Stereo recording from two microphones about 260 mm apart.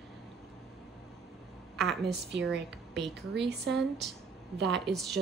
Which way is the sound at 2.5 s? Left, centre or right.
Right.